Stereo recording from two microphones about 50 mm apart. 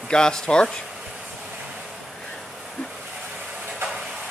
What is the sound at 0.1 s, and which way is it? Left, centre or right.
Speech, centre.